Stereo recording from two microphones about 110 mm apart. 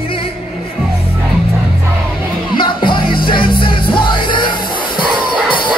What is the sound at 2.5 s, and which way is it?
Music, 45° left (ahead or behind).